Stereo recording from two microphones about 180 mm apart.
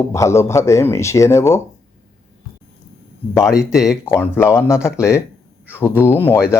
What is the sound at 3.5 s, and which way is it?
Speech, 5° right (ahead or behind).